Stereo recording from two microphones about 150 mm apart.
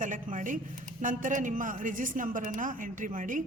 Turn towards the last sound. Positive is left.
turn(degrees=-60)  # may be behind; listen again after turning